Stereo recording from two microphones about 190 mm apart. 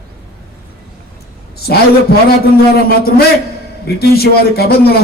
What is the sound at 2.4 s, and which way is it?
A man's voice, 55° left (ahead or behind).